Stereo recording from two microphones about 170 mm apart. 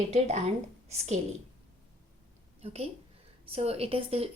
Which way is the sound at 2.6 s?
35° right (ahead or behind).